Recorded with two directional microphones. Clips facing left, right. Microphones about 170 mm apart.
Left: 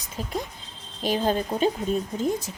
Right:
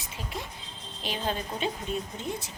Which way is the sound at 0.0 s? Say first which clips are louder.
Left 7 dB; 40° left (ahead or behind).